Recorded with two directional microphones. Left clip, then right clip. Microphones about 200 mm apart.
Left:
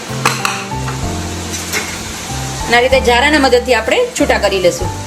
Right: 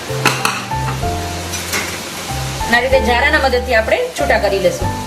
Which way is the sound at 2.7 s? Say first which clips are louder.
Left 3 dB; 45° left (ahead or behind).